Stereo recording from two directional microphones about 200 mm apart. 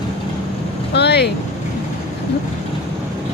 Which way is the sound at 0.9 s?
55° left (ahead or behind).